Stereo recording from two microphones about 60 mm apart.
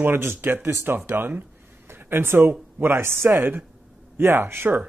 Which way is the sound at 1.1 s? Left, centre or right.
Right.